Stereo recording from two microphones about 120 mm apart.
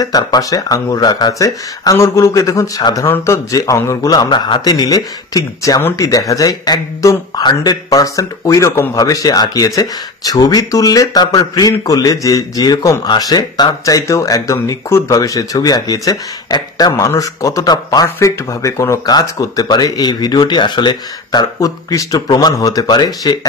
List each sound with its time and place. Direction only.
0.0 s speech: 30° left (ahead or behind)
5.8 s speech: 20° left (ahead or behind)
6.0 s speech: 30° left (ahead or behind)